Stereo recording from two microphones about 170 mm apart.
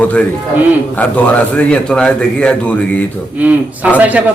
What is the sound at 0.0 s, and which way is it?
A man's voice, 10° left (ahead or behind).